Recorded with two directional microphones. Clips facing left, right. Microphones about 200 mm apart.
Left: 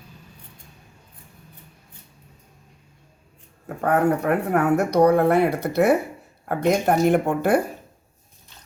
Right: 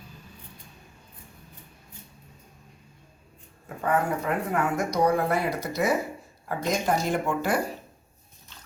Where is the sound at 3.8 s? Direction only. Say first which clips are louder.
Left 6 dB; 65° left (ahead or behind).